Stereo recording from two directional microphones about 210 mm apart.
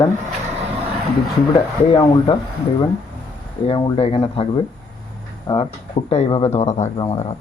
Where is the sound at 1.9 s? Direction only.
20° left (ahead or behind).